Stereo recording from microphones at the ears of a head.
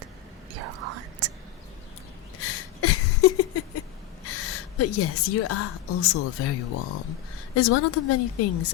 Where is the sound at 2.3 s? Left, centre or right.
Left.